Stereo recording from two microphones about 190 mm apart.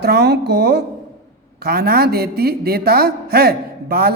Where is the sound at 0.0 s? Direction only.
60° right (ahead or behind).